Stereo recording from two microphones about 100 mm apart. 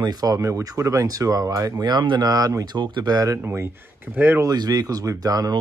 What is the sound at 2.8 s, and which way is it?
Speech, 50° right (ahead or behind).